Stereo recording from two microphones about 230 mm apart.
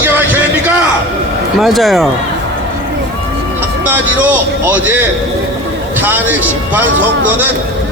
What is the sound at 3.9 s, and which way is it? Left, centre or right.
A man's voice, centre.